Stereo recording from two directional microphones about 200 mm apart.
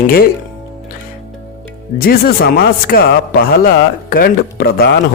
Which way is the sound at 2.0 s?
50° left (ahead or behind).